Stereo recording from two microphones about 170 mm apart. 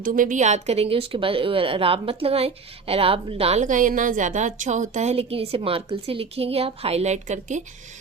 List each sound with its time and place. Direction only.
0.0 s a woman's voice: 50° right (ahead or behind)